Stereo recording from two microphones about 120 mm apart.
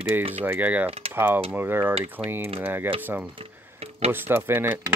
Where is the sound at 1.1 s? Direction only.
20° right (ahead or behind).